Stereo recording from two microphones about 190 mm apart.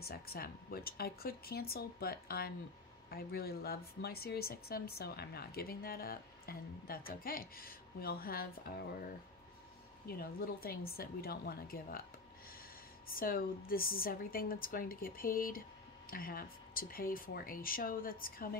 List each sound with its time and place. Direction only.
0.0 s speech: 55° left (ahead or behind)
13.1 s speech: 50° left (ahead or behind)